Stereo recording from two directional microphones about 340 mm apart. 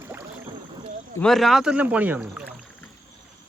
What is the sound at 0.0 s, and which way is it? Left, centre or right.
Boat, centre.